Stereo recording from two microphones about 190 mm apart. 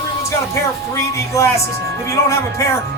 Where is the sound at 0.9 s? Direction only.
15° left (ahead or behind).